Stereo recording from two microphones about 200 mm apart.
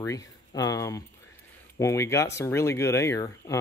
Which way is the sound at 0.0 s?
15° left (ahead or behind).